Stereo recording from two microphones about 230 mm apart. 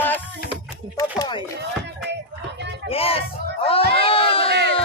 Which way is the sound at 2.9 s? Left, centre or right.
Left.